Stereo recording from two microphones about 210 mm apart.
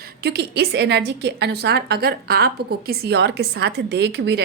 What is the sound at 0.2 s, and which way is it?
A woman's voice, 50° right (ahead or behind).